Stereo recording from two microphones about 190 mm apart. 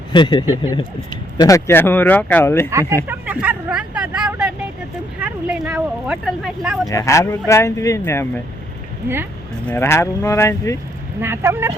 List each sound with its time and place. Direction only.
0.1 s speech: 25° left (ahead or behind)
3.1 s vehicle: 10° right (ahead or behind)
5.2 s a sound: 5° right (ahead or behind)
6.8 s speech: 15° left (ahead or behind)
9.6 s speech: 15° left (ahead or behind)
11.2 s speech: 15° right (ahead or behind)